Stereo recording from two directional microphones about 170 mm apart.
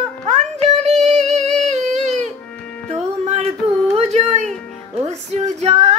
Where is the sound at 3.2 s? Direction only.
40° right (ahead or behind).